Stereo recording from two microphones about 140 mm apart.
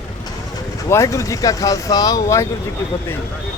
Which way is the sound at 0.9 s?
20° left (ahead or behind).